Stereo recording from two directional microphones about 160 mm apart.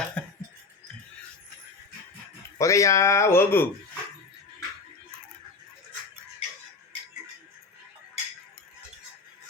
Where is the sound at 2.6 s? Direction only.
20° left (ahead or behind).